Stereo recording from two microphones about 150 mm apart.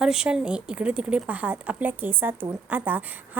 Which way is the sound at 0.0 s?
5° right (ahead or behind).